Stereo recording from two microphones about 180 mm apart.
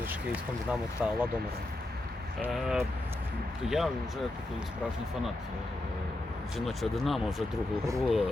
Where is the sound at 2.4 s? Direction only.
Centre (ahead or behind).